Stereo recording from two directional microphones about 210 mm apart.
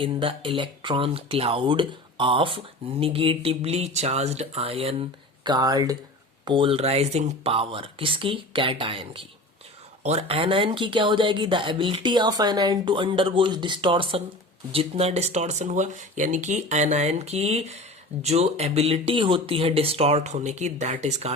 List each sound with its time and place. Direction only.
0.0 s speech: 25° right (ahead or behind)